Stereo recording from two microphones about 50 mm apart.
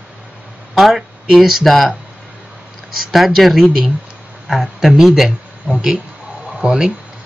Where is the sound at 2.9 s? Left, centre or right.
Centre.